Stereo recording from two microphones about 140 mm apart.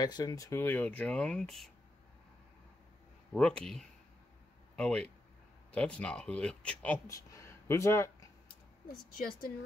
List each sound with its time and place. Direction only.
0.0 s speech: 25° left (ahead or behind); by 1.7 s 5° left (ahead or behind)
3.3 s speech: 5° left (ahead or behind)
7.1 s speech: 20° left (ahead or behind)
9.1 s a woman's voice: 90° left